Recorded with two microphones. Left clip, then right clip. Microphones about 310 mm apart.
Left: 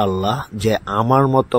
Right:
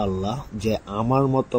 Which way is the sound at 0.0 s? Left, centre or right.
Left.